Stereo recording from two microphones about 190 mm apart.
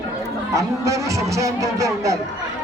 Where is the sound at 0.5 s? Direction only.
15° right (ahead or behind).